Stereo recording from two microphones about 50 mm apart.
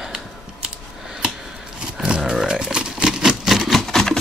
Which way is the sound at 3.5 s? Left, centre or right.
Centre.